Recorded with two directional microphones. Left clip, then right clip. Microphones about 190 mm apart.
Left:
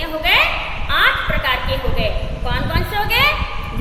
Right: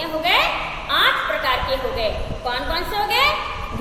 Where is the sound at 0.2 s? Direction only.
5° left (ahead or behind).